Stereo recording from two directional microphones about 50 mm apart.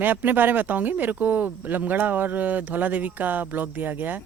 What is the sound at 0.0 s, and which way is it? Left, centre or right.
Speech, right.